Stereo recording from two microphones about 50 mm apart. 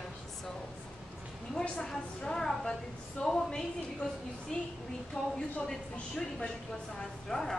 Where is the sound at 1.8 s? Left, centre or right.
Centre.